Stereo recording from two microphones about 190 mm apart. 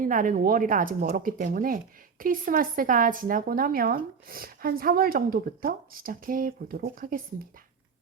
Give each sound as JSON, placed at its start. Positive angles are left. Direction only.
{"t": 0.0, "sound": "speech", "side_deg": -45}